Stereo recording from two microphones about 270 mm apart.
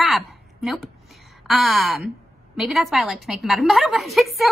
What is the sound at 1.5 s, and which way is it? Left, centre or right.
A woman's voice, centre.